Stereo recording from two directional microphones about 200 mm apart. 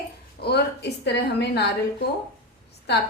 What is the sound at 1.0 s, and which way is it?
A woman's voice, 55° left (ahead or behind).